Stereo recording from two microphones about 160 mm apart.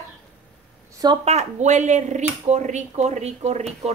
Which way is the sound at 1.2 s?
45° right (ahead or behind).